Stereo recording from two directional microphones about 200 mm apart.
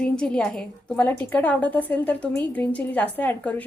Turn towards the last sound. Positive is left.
turn(degrees=10)  # may be behind; listen again after turning